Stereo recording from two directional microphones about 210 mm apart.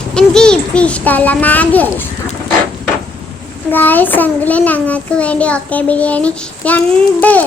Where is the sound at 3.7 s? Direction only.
10° left (ahead or behind).